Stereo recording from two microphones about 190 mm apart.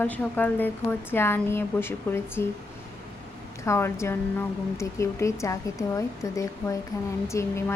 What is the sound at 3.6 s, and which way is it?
A woman's voice, 15° left (ahead or behind).